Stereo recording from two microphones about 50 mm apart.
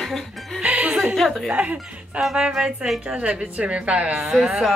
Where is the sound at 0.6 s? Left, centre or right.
Right.